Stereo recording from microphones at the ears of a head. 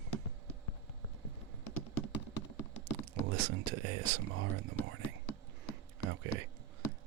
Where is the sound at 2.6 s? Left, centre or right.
Right.